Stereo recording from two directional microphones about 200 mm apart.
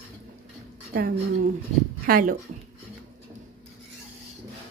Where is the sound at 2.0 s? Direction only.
45° right (ahead or behind).